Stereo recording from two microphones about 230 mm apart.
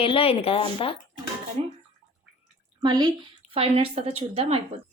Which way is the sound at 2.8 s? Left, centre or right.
Centre.